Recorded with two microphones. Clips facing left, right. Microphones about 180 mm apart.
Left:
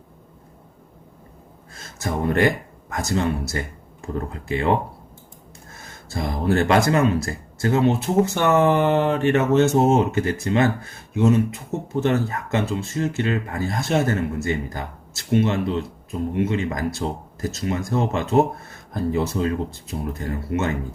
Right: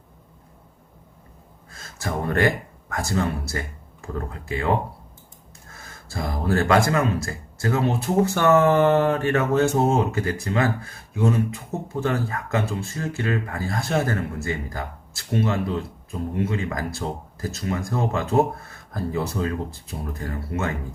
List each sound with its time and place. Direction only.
2.0 s speech: 20° left (ahead or behind)
6.1 s speech: 25° left (ahead or behind)
17.0 s speech: 10° left (ahead or behind)
17.4 s speech: 25° left (ahead or behind)